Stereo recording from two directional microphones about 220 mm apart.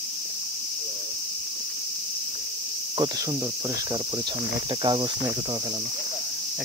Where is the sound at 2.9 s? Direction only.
20° right (ahead or behind).